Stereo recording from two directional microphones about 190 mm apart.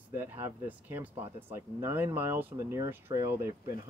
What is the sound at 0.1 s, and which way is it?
Speech, 10° right (ahead or behind).